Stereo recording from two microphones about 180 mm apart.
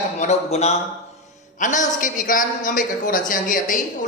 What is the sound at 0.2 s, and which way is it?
A woman's voice, 40° left (ahead or behind).